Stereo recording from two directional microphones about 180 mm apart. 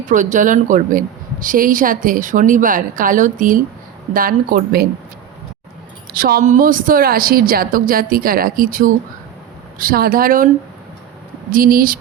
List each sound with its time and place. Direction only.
0.1 s a woman's voice: 45° right (ahead or behind)
6.1 s a woman's voice: 55° right (ahead or behind)
11.5 s a woman's voice: 50° right (ahead or behind)